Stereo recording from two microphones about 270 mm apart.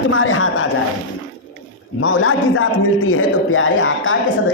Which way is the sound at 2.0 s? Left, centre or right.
Left.